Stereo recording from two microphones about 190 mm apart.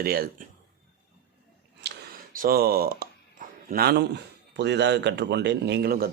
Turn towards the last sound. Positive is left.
turn(degrees=-55)  # may be behind; listen again after turning